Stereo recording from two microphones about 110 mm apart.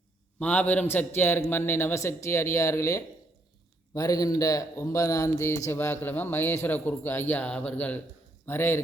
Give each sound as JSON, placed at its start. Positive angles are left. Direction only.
{"t": 0.3, "sound": "a man's voice", "side_deg": 15}